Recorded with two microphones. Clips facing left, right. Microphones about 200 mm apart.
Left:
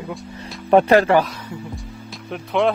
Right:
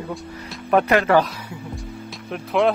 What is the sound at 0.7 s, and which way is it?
Speech, 30° left (ahead or behind).